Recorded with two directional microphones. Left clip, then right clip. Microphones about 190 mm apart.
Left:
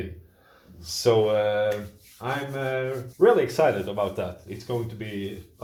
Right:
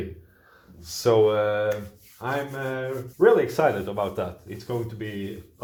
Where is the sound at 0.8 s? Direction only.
20° right (ahead or behind).